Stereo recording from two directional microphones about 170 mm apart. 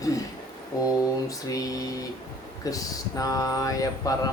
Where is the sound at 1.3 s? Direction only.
20° left (ahead or behind).